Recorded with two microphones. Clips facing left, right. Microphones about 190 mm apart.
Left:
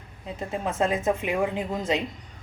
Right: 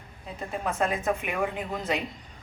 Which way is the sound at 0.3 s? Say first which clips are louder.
Left 2 dB; 25° left (ahead or behind).